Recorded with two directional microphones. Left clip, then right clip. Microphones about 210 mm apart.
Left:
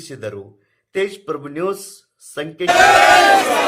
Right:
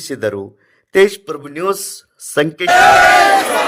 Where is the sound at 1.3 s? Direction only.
5° right (ahead or behind).